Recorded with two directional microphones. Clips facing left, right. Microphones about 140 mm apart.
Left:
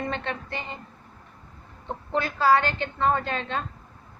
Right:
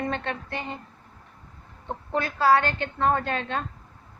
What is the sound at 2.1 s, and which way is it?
A woman's voice, 50° right (ahead or behind).